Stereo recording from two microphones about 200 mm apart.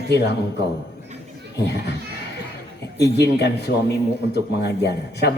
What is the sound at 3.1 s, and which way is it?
A man's voice, 55° left (ahead or behind).